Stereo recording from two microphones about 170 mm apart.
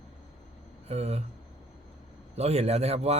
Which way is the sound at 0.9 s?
40° right (ahead or behind).